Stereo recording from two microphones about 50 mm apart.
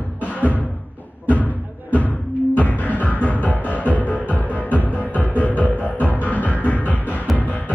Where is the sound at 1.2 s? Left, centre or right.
Left.